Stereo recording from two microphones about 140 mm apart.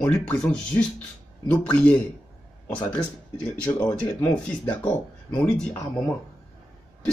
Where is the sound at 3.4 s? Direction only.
10° left (ahead or behind).